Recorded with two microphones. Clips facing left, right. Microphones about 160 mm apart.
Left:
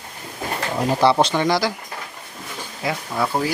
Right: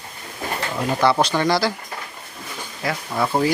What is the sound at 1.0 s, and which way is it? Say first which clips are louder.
Speech: left 1 dB; 25° left (ahead or behind).